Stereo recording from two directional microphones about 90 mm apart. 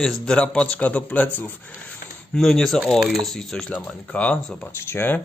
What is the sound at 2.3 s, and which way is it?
A man's voice, 5° left (ahead or behind).